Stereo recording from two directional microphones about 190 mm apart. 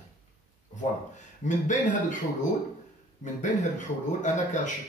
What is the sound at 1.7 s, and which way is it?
Speech, 40° left (ahead or behind).